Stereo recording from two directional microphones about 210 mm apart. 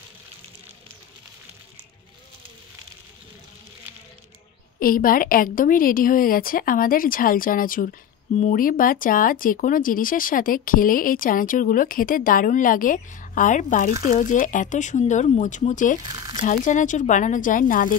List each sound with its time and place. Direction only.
4.7 s speech: 40° left (ahead or behind)